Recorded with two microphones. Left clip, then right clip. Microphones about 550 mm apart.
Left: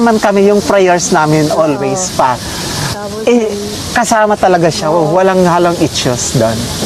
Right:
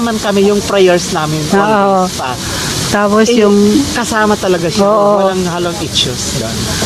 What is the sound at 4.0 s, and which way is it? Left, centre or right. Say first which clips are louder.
Speech: left 3 dB; centre.